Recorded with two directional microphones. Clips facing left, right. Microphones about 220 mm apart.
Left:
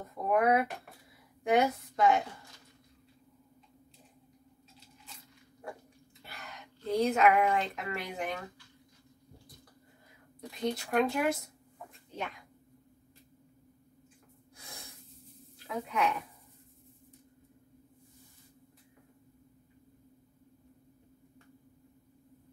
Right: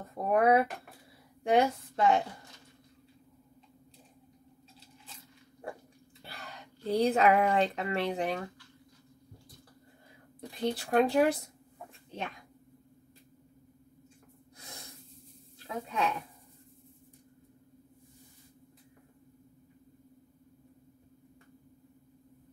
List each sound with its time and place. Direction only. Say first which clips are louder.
0.0 s a woman's voice: right 2 dB; 30° right (ahead or behind)
6.2 s speech: right 1 dB; 30° right (ahead or behind)
10.5 s speech: right 2 dB; 30° right (ahead or behind)
15.6 s speech: left 1 dB; 25° right (ahead or behind)